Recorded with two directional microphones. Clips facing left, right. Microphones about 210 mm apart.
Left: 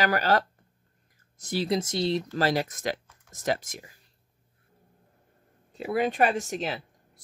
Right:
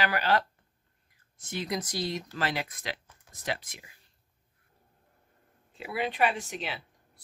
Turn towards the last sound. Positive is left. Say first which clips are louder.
# left 5 dB
turn(degrees=45)  # may be behind; listen again after turning